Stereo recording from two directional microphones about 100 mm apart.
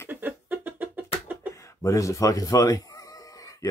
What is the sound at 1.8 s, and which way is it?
Speech, 30° left (ahead or behind).